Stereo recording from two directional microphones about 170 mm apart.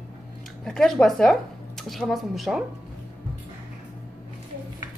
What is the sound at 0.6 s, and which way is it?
A woman's voice, 5° left (ahead or behind).